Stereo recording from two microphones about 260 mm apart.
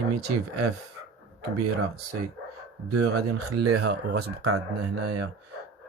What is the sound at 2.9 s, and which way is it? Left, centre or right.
Speech, right.